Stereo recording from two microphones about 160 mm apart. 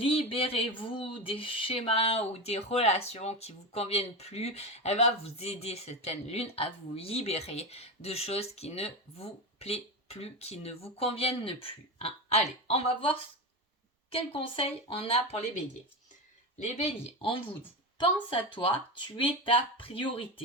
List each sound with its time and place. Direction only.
0.0 s speech: 35° left (ahead or behind)
16.8 s speech: 30° left (ahead or behind)